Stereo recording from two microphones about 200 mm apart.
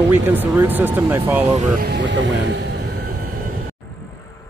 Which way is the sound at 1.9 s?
60° right (ahead or behind).